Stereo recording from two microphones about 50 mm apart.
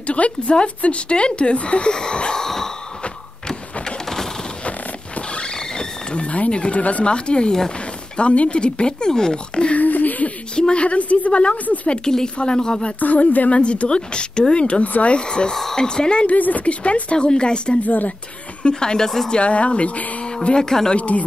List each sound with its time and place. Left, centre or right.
0.0 s speech: left; by 2.7 s centre
3.8 s a sound: centre
4.6 s wild animals: left
8.2 s speech: left
9.8 s a sound: left
10.5 s speech: centre
12.0 s speech: centre
13.0 s speech: left
16.3 s speech: left
17.8 s speech: left
18.6 s speech: centre
19.3 s speech: left
20.4 s speech: centre
20.9 s speech: left